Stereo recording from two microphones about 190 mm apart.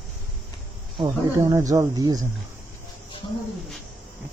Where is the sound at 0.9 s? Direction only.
20° right (ahead or behind).